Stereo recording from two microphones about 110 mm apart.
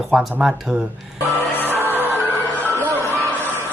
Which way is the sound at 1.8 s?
20° right (ahead or behind).